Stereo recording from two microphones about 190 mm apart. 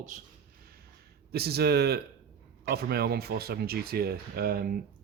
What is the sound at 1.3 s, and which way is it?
Speech, 55° right (ahead or behind).